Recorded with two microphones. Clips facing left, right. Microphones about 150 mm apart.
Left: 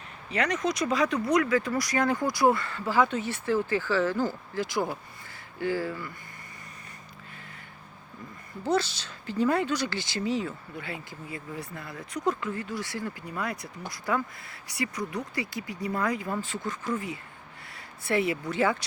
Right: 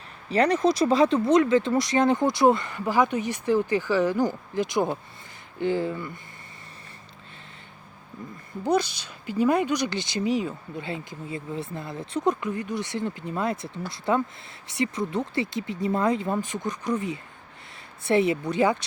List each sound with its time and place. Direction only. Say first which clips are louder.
0.3 s speech: right 7 dB; 30° right (ahead or behind)
8.6 s speech: right 3 dB; 15° right (ahead or behind)